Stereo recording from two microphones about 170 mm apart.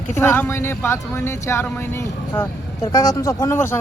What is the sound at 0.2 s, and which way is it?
Speech, 15° left (ahead or behind).